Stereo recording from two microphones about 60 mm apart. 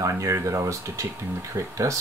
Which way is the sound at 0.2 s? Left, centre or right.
Right.